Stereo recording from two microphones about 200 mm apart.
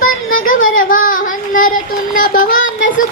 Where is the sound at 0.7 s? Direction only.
45° left (ahead or behind).